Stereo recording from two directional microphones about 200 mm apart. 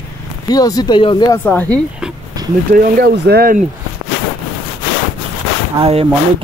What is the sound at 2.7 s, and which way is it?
Speech, 45° right (ahead or behind).